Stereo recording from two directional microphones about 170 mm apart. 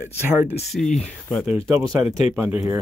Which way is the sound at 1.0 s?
Centre (ahead or behind).